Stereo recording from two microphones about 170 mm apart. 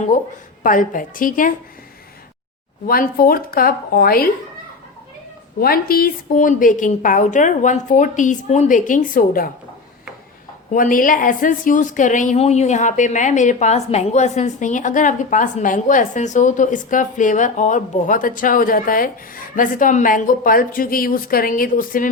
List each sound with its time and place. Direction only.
0.1 s a woman's voice: 50° left (ahead or behind)
2.8 s a woman's voice: 60° left (ahead or behind)
5.5 s a woman's voice: 60° left (ahead or behind)
10.7 s a woman's voice: 55° left (ahead or behind)